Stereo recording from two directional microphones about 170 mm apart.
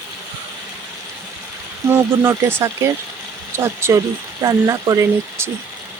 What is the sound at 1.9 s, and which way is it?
Speech, 15° right (ahead or behind).